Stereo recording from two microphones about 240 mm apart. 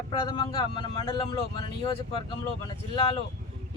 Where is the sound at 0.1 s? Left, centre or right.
Centre.